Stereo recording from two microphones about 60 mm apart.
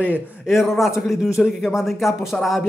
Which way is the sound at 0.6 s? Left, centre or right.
Centre.